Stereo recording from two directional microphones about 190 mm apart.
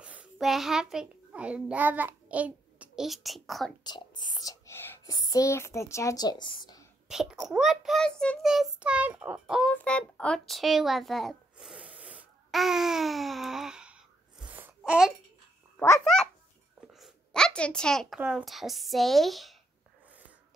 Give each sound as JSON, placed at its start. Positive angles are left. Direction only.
{"t": 0.0, "sound": "a child's voice", "side_deg": -5}
{"t": 3.8, "sound": "speech", "side_deg": 25}
{"t": 7.1, "sound": "a child's voice", "side_deg": -5}
{"t": 9.7, "sound": "a woman's voice", "side_deg": 5}
{"t": 16.9, "sound": "a woman's voice", "side_deg": 0}